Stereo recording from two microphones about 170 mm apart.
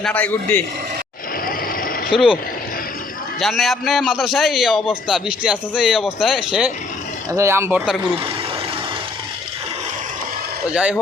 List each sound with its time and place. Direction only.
0.0 s a man's voice: 10° left (ahead or behind)
2.0 s a man's voice: 5° right (ahead or behind)
3.4 s a man's voice: centre (ahead or behind)
7.3 s speech: 15° right (ahead or behind)
10.8 s a man's voice: 5° right (ahead or behind)